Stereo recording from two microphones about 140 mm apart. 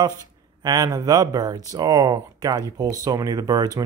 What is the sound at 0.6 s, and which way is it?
Speech, 30° right (ahead or behind).